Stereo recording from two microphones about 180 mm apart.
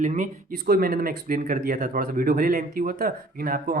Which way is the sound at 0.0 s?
45° right (ahead or behind).